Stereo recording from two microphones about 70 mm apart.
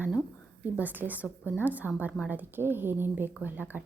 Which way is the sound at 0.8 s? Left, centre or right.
Right.